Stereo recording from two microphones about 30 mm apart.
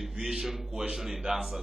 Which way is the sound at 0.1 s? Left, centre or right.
Centre.